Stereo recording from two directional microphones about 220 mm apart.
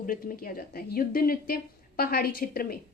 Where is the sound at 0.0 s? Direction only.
40° left (ahead or behind).